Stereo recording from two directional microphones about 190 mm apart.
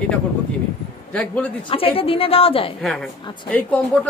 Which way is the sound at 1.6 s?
30° left (ahead or behind).